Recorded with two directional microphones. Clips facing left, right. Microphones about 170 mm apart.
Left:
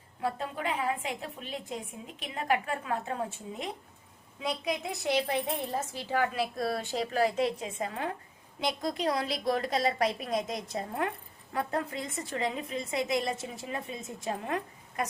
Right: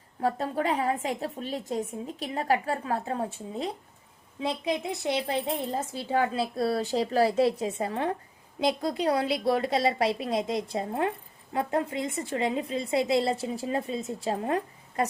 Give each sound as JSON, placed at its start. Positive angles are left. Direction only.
{"t": 0.2, "sound": "a woman's voice", "side_deg": -40}